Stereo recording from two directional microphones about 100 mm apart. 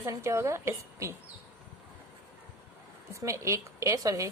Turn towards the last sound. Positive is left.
turn(degrees=-35)  # may be behind; listen again after turning